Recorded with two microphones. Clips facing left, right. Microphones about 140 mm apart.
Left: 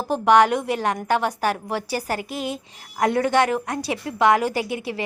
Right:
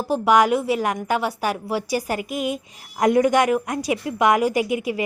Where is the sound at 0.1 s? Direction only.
10° right (ahead or behind).